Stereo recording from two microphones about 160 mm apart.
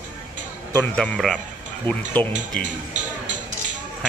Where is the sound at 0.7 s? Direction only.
10° left (ahead or behind).